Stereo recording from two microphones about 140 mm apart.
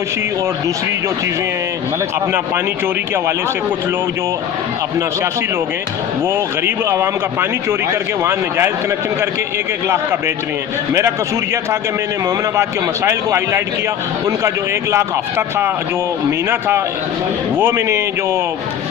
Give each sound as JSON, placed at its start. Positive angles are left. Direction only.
{"t": 6.2, "sound": "speech", "side_deg": -15}
{"t": 12.5, "sound": "speech", "side_deg": -20}